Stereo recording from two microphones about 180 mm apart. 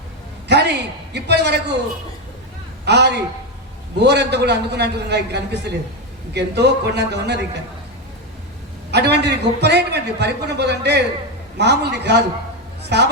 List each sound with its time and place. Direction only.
0.4 s a man's voice: 65° right (ahead or behind)
2.8 s a man's voice: 70° right (ahead or behind)
8.9 s a man's voice: 70° right (ahead or behind)